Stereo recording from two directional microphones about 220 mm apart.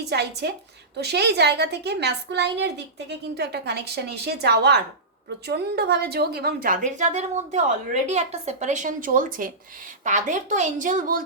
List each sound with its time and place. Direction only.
0.0 s a woman's voice: 50° right (ahead or behind)